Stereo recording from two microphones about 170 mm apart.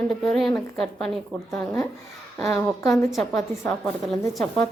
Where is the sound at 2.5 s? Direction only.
20° left (ahead or behind).